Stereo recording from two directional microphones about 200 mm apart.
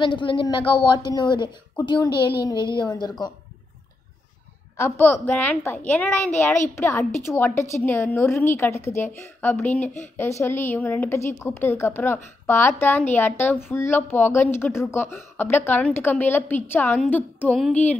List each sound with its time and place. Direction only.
0.0 s a woman's voice: 25° left (ahead or behind)
4.7 s a woman's voice: 10° left (ahead or behind)